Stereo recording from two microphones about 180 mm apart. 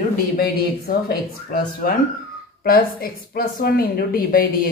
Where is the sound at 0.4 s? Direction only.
60° left (ahead or behind).